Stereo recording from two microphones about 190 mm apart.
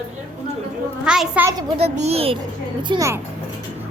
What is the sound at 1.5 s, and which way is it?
Speech, 20° right (ahead or behind).